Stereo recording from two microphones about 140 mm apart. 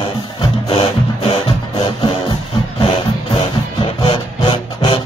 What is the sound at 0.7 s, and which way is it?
Music, 40° left (ahead or behind).